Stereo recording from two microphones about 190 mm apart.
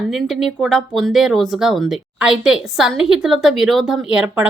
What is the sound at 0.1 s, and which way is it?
Speech, centre (ahead or behind).